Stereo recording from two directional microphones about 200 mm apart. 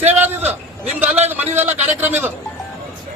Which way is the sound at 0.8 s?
10° right (ahead or behind).